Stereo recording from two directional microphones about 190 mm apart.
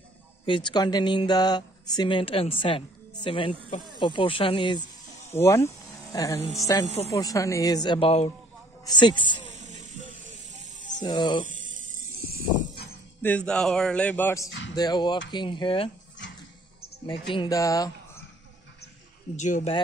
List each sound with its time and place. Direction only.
0.5 s speech: 25° left (ahead or behind)
5.3 s speech: 15° left (ahead or behind)
9.6 s hiss: 40° right (ahead or behind)
11.0 s speech: 25° left (ahead or behind)
11.4 s a sound: 45° right (ahead or behind)
13.2 s a man's voice: 5° left (ahead or behind); by 15.9 s 25° left (ahead or behind)
17.3 s speech: 20° left (ahead or behind)
19.3 s speech: 40° left (ahead or behind)